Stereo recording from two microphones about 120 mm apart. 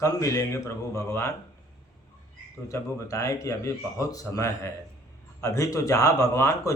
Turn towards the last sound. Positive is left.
turn(degrees=25)  # may be behind; listen again after turning